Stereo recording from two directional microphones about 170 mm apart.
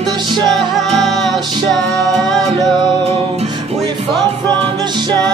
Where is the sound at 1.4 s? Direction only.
25° right (ahead or behind).